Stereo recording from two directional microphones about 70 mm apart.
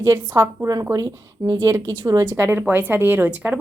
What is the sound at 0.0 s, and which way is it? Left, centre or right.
Speech, right.